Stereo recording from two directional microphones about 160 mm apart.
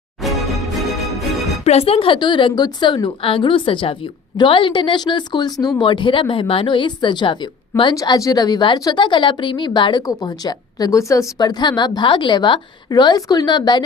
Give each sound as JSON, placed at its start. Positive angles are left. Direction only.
{"t": 0.2, "sound": "music", "side_deg": 0}
{"t": 1.6, "sound": "a woman's voice", "side_deg": 40}